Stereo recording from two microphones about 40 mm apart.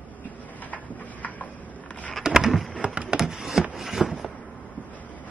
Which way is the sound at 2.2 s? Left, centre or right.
Centre.